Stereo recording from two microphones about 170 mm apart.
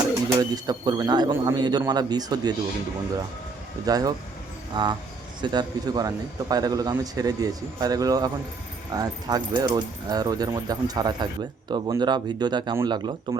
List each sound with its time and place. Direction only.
0.3 s a man's voice: 25° right (ahead or behind)
3.8 s a man's voice: 20° right (ahead or behind)